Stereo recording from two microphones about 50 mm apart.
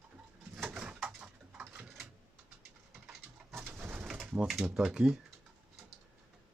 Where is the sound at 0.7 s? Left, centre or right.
Right.